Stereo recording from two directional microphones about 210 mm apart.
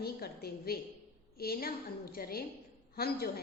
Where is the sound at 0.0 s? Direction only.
45° left (ahead or behind).